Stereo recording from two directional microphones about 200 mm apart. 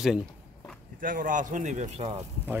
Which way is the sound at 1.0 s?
40° right (ahead or behind).